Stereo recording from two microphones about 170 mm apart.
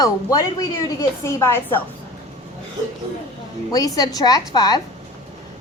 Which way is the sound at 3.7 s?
20° left (ahead or behind).